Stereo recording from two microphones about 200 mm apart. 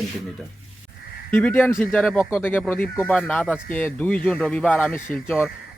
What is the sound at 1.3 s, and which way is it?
A man's voice, 10° left (ahead or behind).